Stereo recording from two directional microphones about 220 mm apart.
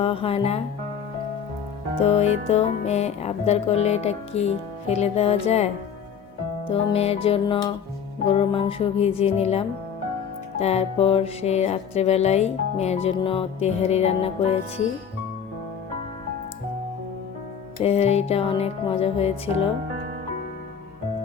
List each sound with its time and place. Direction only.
0.0 s music: 25° left (ahead or behind)
2.0 s music: 30° left (ahead or behind)
17.8 s music: 30° left (ahead or behind)